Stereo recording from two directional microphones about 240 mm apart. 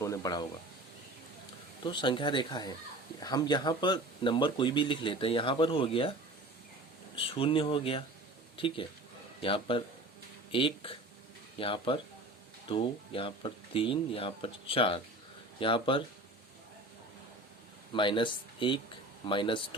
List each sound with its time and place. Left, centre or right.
0.0 s a sound: centre
1.8 s speech: centre
7.2 s speech: left
17.9 s speech: left